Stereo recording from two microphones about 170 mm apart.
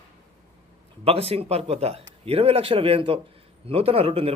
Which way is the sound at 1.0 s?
35° right (ahead or behind).